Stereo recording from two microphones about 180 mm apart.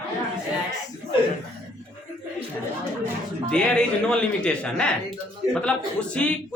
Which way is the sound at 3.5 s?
5° left (ahead or behind).